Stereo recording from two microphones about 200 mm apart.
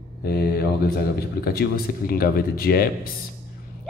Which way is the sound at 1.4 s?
50° left (ahead or behind).